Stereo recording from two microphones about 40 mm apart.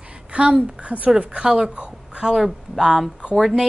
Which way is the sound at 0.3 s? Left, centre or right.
Right.